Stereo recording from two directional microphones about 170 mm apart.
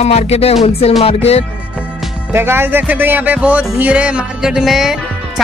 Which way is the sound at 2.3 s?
15° right (ahead or behind).